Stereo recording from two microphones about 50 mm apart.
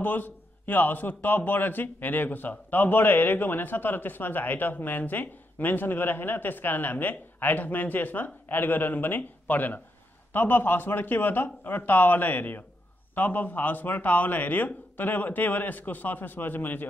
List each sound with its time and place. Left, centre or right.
0.0 s a man's voice: left